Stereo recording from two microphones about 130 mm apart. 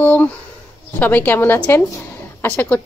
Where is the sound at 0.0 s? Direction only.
10° left (ahead or behind).